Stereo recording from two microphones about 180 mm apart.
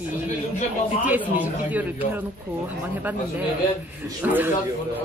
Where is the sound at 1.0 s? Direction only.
10° right (ahead or behind).